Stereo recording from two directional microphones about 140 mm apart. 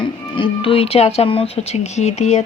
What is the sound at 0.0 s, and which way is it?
Speech, 35° left (ahead or behind).